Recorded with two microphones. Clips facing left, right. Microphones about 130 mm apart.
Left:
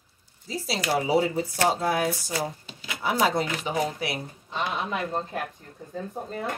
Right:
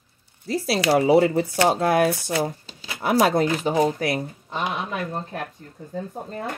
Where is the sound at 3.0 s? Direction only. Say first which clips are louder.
Right 5 dB; 60° right (ahead or behind).